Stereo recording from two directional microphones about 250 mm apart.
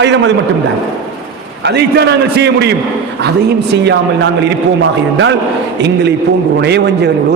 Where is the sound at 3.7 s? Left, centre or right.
Right.